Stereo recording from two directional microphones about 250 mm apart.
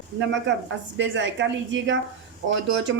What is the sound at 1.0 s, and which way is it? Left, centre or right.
A woman's voice, right.